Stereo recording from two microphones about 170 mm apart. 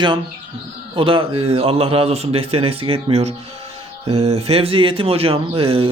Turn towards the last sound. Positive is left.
turn(degrees=-30)  # may be behind; listen again after turning